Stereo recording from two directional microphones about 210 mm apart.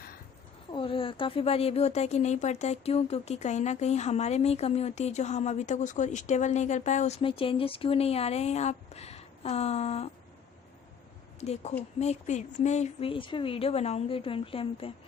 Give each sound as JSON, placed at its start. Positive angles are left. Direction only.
{"t": 0.7, "sound": "speech", "side_deg": 25}
{"t": 11.3, "sound": "speech", "side_deg": 30}